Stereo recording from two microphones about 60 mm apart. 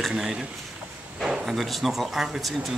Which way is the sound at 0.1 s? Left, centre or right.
Centre.